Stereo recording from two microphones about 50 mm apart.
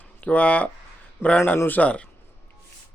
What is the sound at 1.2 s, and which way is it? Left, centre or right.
Speech, left.